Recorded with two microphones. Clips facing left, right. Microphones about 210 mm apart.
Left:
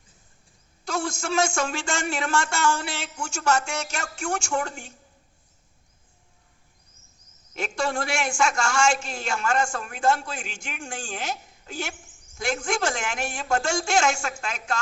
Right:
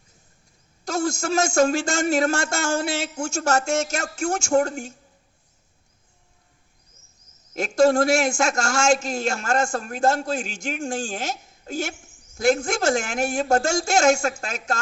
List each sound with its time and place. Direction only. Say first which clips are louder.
0.9 s a man's voice: right 4 dB; 45° right (ahead or behind)
7.5 s a man's voice: right 10 dB; 45° right (ahead or behind)